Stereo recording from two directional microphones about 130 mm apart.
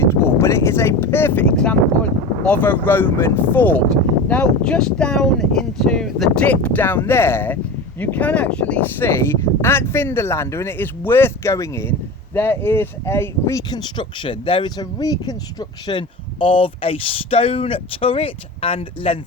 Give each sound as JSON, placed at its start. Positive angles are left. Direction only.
{"t": 0.0, "sound": "a sound", "side_deg": 20}
{"t": 2.4, "sound": "speech", "side_deg": 10}
{"t": 13.7, "sound": "speech", "side_deg": 35}
{"t": 15.9, "sound": "speech", "side_deg": 40}